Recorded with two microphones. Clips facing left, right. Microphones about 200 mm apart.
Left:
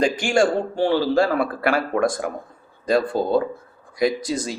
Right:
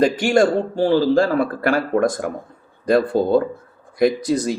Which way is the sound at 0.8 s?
40° right (ahead or behind).